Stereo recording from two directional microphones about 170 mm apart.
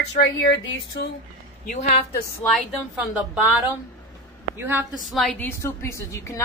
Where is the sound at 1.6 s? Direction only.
45° left (ahead or behind).